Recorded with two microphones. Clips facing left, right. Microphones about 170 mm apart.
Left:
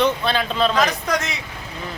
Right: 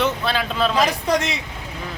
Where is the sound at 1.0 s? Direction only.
30° right (ahead or behind).